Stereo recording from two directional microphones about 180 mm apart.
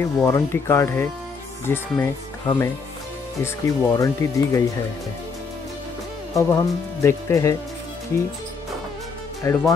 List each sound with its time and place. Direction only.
0.0 s speech: 15° left (ahead or behind)
6.3 s speech: 15° left (ahead or behind)
9.5 s speech: 15° left (ahead or behind)